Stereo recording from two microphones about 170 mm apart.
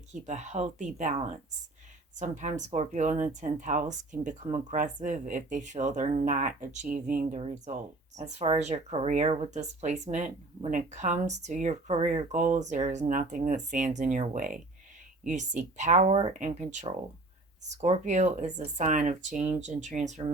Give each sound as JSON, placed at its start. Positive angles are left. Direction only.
{"t": 0.1, "sound": "speech", "side_deg": -45}